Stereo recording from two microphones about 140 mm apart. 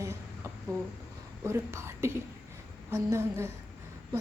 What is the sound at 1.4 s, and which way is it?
A woman's voice, 20° right (ahead or behind).